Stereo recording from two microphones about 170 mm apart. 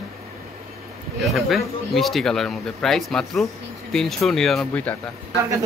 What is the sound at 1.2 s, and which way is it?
Speech, centre (ahead or behind).